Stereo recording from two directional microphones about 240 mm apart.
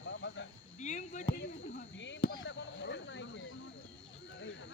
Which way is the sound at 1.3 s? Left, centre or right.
Left.